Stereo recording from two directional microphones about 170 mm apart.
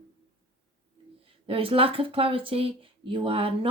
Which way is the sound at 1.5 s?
30° right (ahead or behind).